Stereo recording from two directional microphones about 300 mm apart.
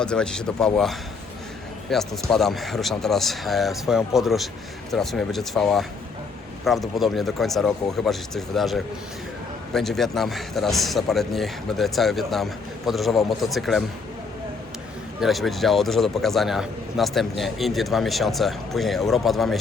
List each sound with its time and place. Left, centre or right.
0.0 s a man's voice: centre
15.2 s a man's voice: centre